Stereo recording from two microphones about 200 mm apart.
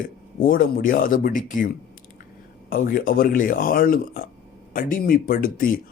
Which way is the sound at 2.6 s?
45° left (ahead or behind).